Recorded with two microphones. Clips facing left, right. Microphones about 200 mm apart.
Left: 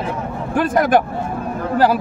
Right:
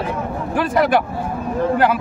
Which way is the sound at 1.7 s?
35° left (ahead or behind).